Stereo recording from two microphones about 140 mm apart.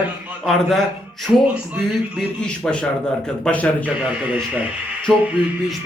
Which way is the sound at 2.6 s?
5° left (ahead or behind).